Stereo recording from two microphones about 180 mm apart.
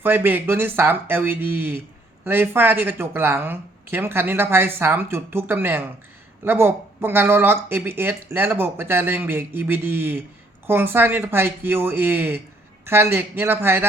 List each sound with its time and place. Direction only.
0.0 s speech: 10° right (ahead or behind)